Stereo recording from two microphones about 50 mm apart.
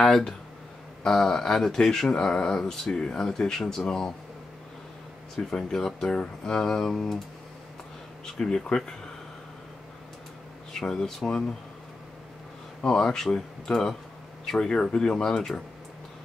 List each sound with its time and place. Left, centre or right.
0.0 s speech: centre
5.5 s speech: centre
8.4 s speech: centre
10.7 s speech: centre
12.8 s speech: centre